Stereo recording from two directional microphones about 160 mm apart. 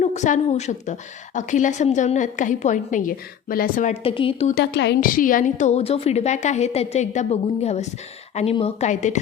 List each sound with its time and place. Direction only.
0.0 s a woman's voice: 45° left (ahead or behind)
4.0 s a woman's voice: 35° left (ahead or behind)
4.5 s a woman's voice: 90° left; by 9.1 s 50° left (ahead or behind)